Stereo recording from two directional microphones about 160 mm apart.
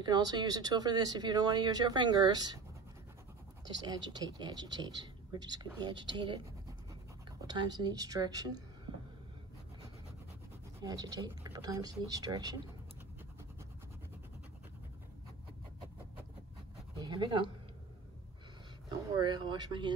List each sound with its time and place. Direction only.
0.0 s speech: 25° right (ahead or behind)
3.6 s speech: 25° right (ahead or behind)
7.4 s speech: 25° right (ahead or behind)
10.8 s speech: 25° right (ahead or behind)
17.0 s speech: 25° right (ahead or behind)
19.1 s speech: 30° right (ahead or behind)